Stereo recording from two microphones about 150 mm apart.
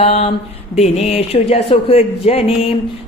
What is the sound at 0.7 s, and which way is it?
Speech, 45° left (ahead or behind).